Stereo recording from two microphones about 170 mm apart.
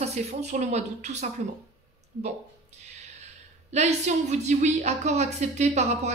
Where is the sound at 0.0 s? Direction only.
40° right (ahead or behind).